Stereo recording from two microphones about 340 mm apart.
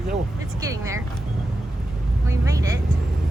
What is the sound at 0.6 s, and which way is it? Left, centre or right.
Speech, centre.